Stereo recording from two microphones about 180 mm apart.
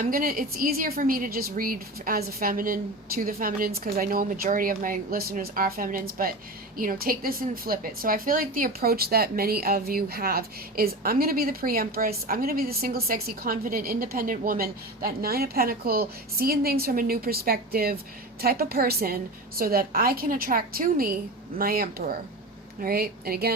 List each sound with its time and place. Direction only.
0.0 s a woman's voice: 50° right (ahead or behind)